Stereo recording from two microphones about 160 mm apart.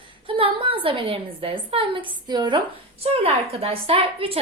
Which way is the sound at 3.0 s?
40° right (ahead or behind).